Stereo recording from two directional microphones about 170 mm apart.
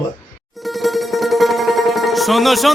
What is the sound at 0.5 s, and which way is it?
Music, centre (ahead or behind).